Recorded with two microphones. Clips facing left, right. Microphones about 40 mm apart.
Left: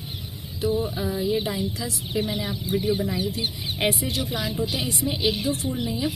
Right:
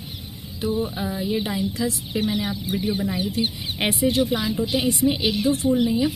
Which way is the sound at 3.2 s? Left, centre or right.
Right.